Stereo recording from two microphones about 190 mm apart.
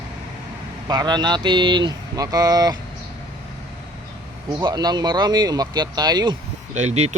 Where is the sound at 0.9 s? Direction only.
20° right (ahead or behind).